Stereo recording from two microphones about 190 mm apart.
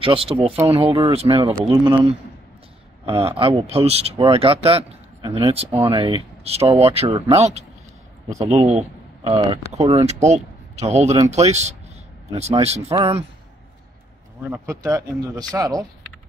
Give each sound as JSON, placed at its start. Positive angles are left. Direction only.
{"t": 0.0, "sound": "a man's voice", "side_deg": -30}
{"t": 9.3, "sound": "speech", "side_deg": -20}
{"t": 9.7, "sound": "speech", "side_deg": -35}
{"t": 14.4, "sound": "speech", "side_deg": -15}